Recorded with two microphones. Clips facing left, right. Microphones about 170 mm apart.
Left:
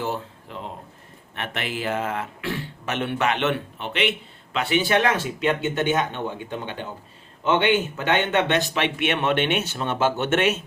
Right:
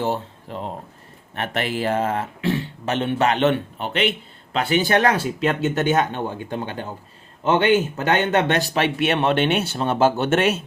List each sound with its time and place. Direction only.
0.0 s speech: 35° right (ahead or behind)